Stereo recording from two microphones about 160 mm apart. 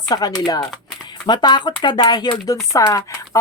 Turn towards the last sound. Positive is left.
turn(degrees=20)  # may be behind; listen again after turning